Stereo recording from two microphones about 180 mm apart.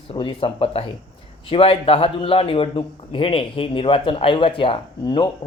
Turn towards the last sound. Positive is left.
turn(degrees=25)  # may be behind; listen again after turning